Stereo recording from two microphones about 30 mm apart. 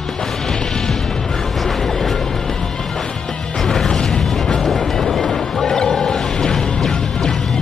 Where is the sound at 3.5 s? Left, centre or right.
Centre.